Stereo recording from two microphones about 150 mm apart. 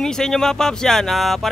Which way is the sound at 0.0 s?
5° left (ahead or behind).